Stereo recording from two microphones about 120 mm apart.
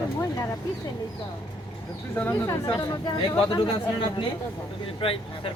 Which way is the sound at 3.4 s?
45° left (ahead or behind).